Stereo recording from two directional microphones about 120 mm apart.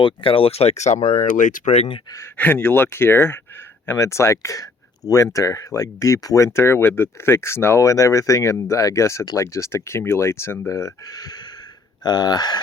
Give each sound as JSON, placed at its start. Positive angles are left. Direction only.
{"t": 0.0, "sound": "speech", "side_deg": 50}
{"t": 2.0, "sound": "speech", "side_deg": 25}
{"t": 2.3, "sound": "speech", "side_deg": 15}